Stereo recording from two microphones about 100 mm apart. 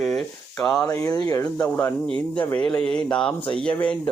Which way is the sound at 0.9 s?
35° left (ahead or behind).